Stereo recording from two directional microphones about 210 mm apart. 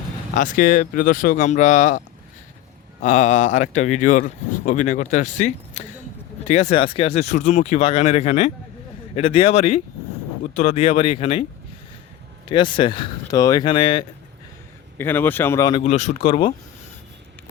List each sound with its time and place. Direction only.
0.3 s speech: 40° left (ahead or behind)
3.0 s speech: 35° left (ahead or behind)
12.5 s speech: 25° left (ahead or behind)
14.9 s speech: 10° left (ahead or behind)
15.8 s speech: 30° left (ahead or behind)